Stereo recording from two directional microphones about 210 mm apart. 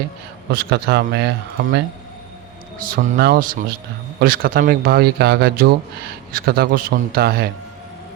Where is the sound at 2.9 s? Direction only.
45° right (ahead or behind).